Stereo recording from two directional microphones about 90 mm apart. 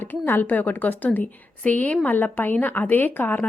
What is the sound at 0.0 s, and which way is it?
A woman's voice, 25° left (ahead or behind).